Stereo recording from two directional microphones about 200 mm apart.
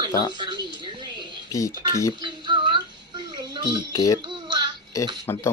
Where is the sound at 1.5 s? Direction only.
15° left (ahead or behind).